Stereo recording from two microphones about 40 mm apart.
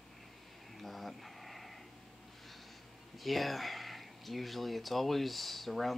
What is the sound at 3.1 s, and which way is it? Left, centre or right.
Speech, centre.